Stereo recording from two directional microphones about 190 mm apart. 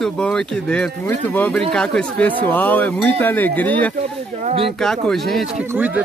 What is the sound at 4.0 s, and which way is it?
Speech, 30° right (ahead or behind).